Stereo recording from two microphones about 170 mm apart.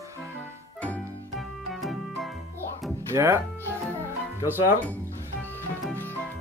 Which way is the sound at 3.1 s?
15° right (ahead or behind).